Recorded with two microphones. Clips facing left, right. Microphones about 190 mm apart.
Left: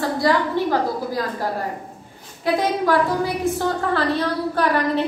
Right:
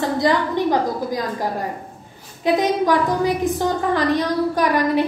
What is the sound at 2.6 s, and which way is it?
A woman's voice, 15° right (ahead or behind).